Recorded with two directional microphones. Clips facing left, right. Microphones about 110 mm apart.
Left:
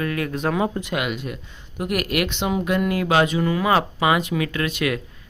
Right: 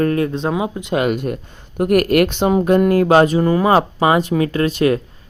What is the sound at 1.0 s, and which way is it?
Speech, 45° right (ahead or behind).